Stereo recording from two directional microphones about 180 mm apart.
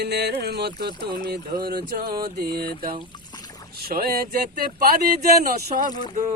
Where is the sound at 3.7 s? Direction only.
60° right (ahead or behind).